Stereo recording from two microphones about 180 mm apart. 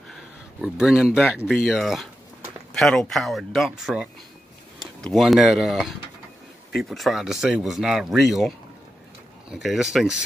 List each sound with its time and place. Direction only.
0.1 s speech: 5° right (ahead or behind)